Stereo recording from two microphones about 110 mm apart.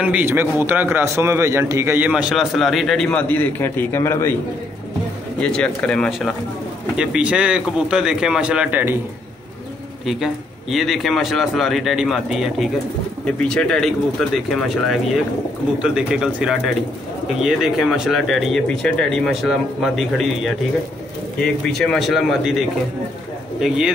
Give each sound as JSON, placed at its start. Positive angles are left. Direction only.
{"t": 0.0, "sound": "a man's voice", "side_deg": -15}
{"t": 2.0, "sound": "speech", "side_deg": -10}
{"t": 3.1, "sound": "a man's voice", "side_deg": 15}
{"t": 5.4, "sound": "speech", "side_deg": 10}
{"t": 7.0, "sound": "speech", "side_deg": -10}
{"t": 10.0, "sound": "speech", "side_deg": 0}